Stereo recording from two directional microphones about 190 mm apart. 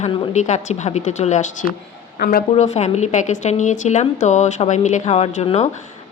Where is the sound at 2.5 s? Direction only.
35° left (ahead or behind).